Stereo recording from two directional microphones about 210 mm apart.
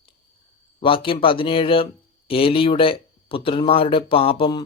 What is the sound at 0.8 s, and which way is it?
Speech, 25° left (ahead or behind).